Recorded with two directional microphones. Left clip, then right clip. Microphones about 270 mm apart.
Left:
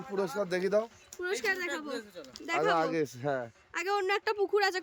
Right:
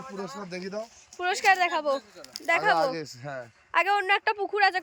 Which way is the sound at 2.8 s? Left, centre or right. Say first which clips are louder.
Right 3 dB; centre.